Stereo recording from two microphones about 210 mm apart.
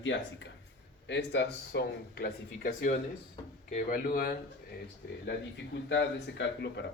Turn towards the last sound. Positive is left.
turn(degrees=60)  # may be behind; listen again after turning